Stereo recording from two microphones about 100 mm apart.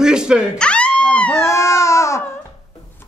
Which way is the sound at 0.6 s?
10° left (ahead or behind).